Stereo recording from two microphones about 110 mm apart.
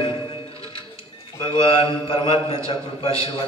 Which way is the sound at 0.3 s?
55° left (ahead or behind).